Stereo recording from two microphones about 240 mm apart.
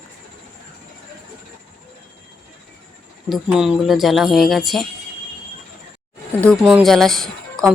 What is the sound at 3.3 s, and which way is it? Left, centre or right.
Speech, centre.